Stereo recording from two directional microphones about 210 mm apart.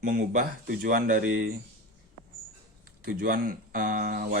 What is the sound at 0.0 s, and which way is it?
Speech, 40° right (ahead or behind).